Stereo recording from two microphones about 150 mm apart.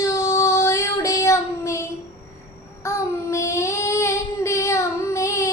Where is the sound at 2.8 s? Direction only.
20° left (ahead or behind).